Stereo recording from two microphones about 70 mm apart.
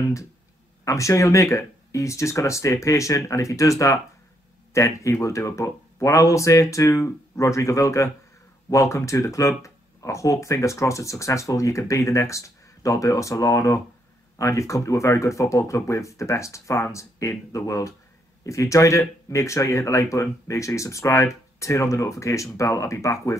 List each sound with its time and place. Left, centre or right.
0.8 s speech: left